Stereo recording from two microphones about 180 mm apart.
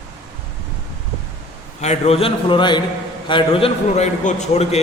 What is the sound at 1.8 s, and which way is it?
A man's voice, 35° left (ahead or behind).